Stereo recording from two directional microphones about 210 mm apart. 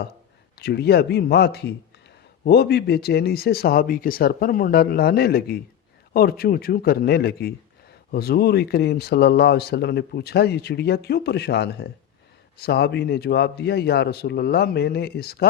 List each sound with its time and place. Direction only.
0.6 s speech: 50° left (ahead or behind)